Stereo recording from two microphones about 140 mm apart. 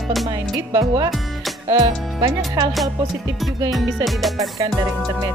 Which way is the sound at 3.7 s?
Centre (ahead or behind).